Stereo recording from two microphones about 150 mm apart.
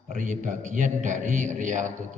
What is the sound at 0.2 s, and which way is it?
A man's voice, 60° right (ahead or behind).